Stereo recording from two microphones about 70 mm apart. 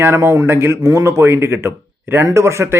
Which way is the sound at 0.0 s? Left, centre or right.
Right.